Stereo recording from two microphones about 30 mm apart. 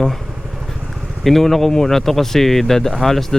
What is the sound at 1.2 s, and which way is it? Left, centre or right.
Speech, centre.